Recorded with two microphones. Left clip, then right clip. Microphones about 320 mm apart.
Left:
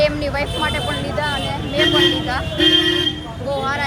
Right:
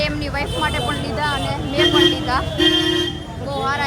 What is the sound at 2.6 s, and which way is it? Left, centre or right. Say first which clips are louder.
Speech: left 3 dB; right.